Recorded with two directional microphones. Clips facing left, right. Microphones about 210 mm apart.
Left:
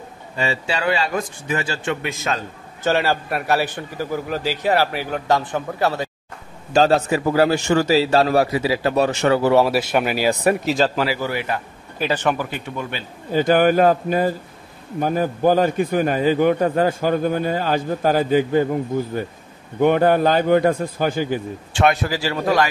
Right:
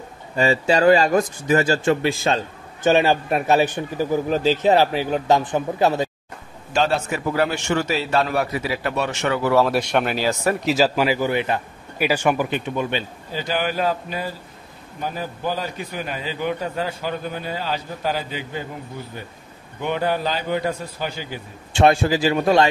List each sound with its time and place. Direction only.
0.4 s a man's voice: 40° right (ahead or behind)
2.8 s a man's voice: 15° right (ahead or behind)
6.7 s a man's voice: 40° left (ahead or behind)
9.7 s speech: 5° left (ahead or behind)
10.6 s speech: 5° right (ahead or behind)
11.1 s a man's voice: 20° right (ahead or behind)
12.0 s speech: 10° right (ahead or behind)
13.3 s a man's voice: 50° left (ahead or behind)
19.8 s a man's voice: 50° left (ahead or behind)
21.7 s a man's voice: 25° right (ahead or behind)